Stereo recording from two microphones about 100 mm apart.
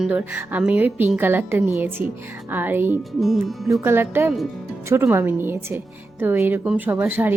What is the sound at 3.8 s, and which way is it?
A woman's voice, 25° right (ahead or behind).